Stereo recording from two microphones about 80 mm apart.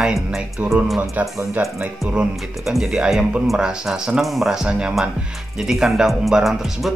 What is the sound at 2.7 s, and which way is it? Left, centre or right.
Speech, centre.